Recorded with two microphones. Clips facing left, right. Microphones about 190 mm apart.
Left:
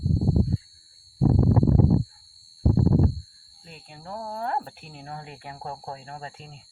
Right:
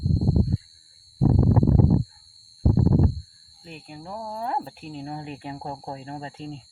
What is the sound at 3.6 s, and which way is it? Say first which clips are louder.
Speech: right 4 dB; 15° right (ahead or behind).